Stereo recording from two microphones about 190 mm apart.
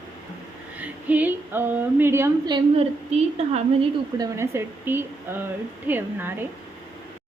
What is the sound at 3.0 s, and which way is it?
Speech, 35° right (ahead or behind).